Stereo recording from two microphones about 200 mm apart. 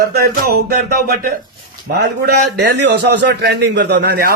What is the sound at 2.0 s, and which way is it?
A man's voice, 55° right (ahead or behind).